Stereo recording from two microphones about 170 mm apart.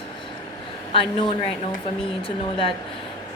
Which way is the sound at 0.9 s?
30° left (ahead or behind).